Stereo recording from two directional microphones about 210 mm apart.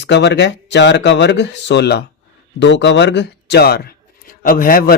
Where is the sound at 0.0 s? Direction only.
55° left (ahead or behind).